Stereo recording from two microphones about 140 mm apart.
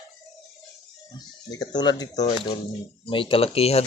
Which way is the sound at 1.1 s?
30° left (ahead or behind).